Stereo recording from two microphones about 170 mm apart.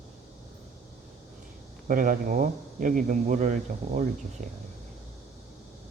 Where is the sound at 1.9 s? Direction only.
55° right (ahead or behind).